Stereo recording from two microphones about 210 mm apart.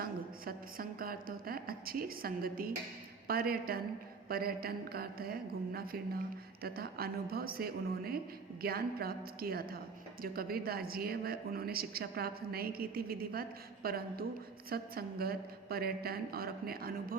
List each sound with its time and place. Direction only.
0.0 s a woman's voice: 45° right (ahead or behind)